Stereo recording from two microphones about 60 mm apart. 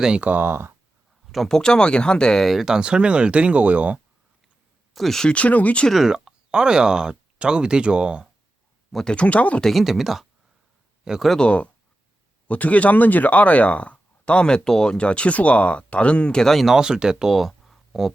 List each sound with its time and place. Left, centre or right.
0.2 s speech: right
1.5 s speech: centre
2.5 s speech: centre; by 4.0 s right
4.9 s speech: centre
5.3 s speech: left
5.9 s speech: centre
9.0 s speech: left
9.6 s speech: centre
11.3 s speech: centre
16.6 s speech: centre